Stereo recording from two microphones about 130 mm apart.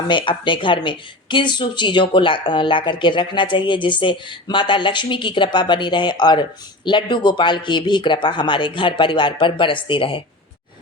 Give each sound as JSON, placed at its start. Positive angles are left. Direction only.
{"t": 0.1, "sound": "speech", "side_deg": 40}